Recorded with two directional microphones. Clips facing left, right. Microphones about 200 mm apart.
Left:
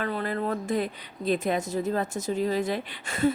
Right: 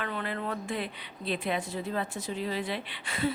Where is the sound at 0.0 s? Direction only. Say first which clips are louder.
Left 5 dB; 40° left (ahead or behind).